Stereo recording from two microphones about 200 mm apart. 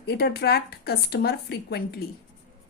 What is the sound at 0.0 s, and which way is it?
A woman's voice, 55° left (ahead or behind).